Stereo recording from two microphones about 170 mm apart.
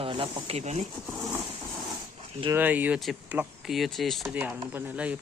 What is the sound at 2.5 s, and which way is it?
Speech, 10° right (ahead or behind).